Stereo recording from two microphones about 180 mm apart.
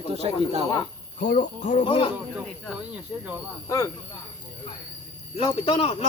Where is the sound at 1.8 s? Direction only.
30° left (ahead or behind).